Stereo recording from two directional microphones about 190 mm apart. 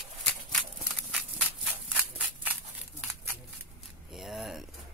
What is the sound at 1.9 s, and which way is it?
Scissors, 10° right (ahead or behind).